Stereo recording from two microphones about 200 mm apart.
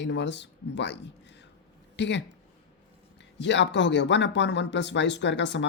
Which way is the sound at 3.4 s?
60° left (ahead or behind).